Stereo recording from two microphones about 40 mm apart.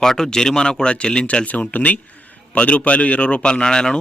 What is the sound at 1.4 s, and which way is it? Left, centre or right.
A man's voice, left.